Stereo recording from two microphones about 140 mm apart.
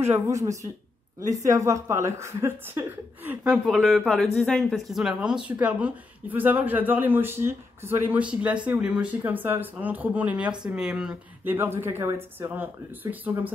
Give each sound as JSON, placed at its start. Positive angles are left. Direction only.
{"t": 0.0, "sound": "a woman's voice", "side_deg": -20}
{"t": 3.4, "sound": "speech", "side_deg": 0}